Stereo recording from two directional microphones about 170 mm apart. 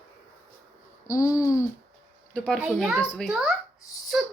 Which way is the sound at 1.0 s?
20° left (ahead or behind).